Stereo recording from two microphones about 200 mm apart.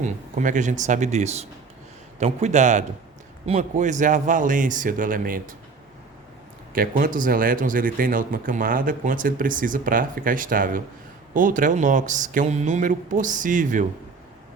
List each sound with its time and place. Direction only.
0.0 s speech: 40° right (ahead or behind)
6.7 s speech: 45° right (ahead or behind)